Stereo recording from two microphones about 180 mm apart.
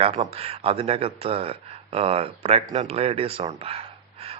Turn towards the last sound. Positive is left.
turn(degrees=-35)  # may be behind; listen again after turning